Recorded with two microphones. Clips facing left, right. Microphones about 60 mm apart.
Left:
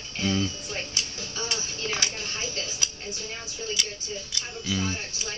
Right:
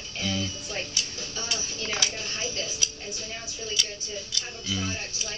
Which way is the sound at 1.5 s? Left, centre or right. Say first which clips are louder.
Even; left.